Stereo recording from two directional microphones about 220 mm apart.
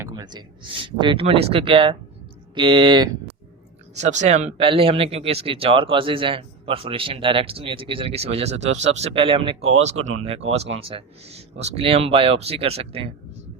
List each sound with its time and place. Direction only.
0.0 s speech: 20° right (ahead or behind)
4.0 s speech: 30° right (ahead or behind)
10.0 s speech: 75° right (ahead or behind)
10.2 s speech: 25° right (ahead or behind)